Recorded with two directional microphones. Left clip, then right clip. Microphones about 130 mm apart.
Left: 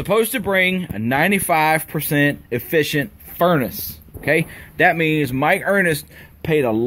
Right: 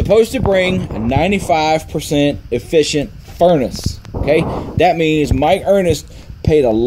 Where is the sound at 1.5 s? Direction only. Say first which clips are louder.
Right 3 dB; 10° right (ahead or behind).